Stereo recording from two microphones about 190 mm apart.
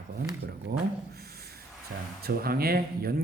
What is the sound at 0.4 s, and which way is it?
A man's voice, 55° right (ahead or behind).